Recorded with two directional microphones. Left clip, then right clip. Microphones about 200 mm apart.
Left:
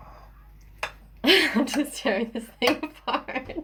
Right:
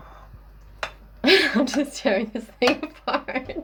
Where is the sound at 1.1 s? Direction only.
25° right (ahead or behind).